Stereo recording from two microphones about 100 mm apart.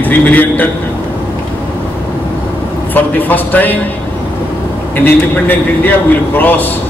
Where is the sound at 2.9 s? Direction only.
20° left (ahead or behind).